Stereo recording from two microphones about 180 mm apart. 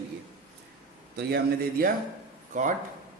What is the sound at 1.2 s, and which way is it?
Speech, 65° right (ahead or behind).